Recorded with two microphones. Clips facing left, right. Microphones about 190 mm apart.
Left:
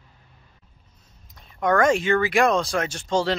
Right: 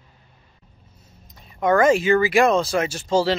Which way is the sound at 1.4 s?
5° right (ahead or behind).